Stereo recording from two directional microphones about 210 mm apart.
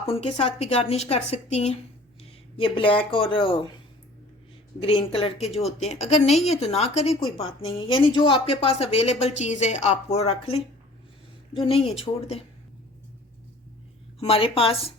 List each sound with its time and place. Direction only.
0.0 s speech: 30° left (ahead or behind)
4.8 s speech: 25° left (ahead or behind)
14.2 s speech: 25° left (ahead or behind)